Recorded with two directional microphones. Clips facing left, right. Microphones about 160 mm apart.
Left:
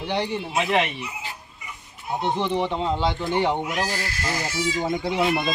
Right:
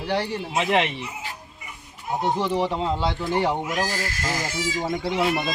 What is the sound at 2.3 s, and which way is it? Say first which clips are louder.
A man's voice: even; 5° right (ahead or behind).